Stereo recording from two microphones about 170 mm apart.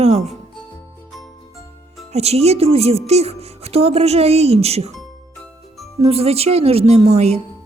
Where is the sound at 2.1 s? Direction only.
40° right (ahead or behind).